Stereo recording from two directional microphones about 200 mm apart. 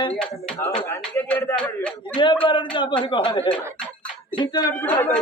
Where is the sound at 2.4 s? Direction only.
25° left (ahead or behind).